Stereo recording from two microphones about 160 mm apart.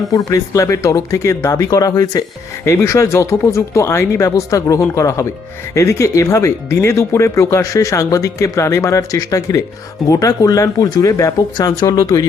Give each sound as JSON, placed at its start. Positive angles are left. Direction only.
{"t": 0.1, "sound": "speech", "side_deg": 20}